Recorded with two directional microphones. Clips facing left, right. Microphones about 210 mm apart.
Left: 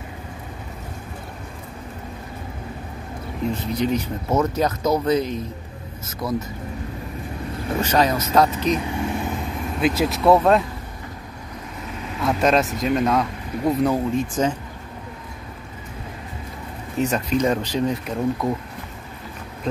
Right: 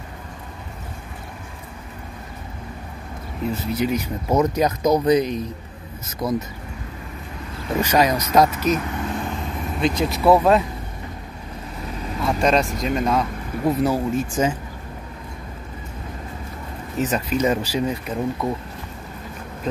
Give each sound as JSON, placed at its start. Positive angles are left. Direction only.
{"t": 3.5, "sound": "speech", "side_deg": -10}
{"t": 7.8, "sound": "speech", "side_deg": -10}
{"t": 8.7, "sound": "vehicle", "side_deg": 15}
{"t": 9.8, "sound": "speech", "side_deg": 5}
{"t": 12.2, "sound": "speech", "side_deg": 0}
{"t": 17.0, "sound": "speech", "side_deg": -5}